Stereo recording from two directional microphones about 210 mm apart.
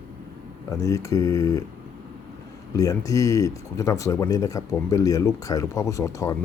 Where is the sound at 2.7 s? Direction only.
15° left (ahead or behind).